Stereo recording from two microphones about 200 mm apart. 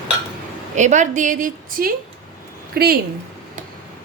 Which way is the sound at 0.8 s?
35° right (ahead or behind).